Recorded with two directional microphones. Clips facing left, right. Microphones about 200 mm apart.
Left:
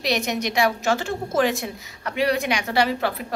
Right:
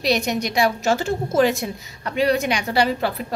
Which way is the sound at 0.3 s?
35° right (ahead or behind).